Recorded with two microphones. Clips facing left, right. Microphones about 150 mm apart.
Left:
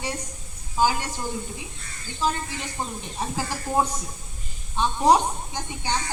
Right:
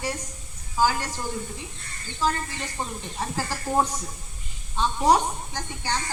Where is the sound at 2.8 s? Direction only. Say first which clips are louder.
Left 1 dB; 5° left (ahead or behind).